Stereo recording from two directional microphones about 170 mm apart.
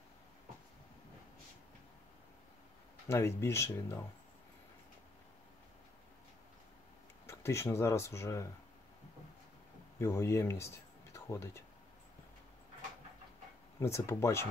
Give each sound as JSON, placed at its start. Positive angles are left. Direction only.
{"t": 3.1, "sound": "speech", "side_deg": 15}
{"t": 7.2, "sound": "speech", "side_deg": 15}
{"t": 9.9, "sound": "speech", "side_deg": 15}
{"t": 13.7, "sound": "speech", "side_deg": 15}